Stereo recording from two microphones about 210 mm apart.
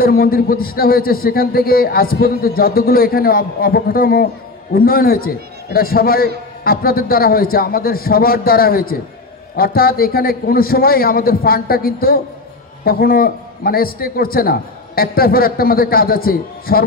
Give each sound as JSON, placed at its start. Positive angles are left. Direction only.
{"t": 0.0, "sound": "a man's voice", "side_deg": 45}